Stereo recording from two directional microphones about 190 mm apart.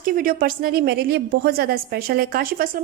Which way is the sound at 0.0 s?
50° right (ahead or behind).